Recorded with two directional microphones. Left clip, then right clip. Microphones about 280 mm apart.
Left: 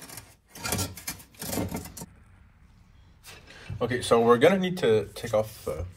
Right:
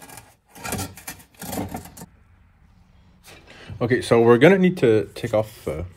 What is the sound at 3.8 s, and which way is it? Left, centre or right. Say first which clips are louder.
Speech: right 5 dB; right.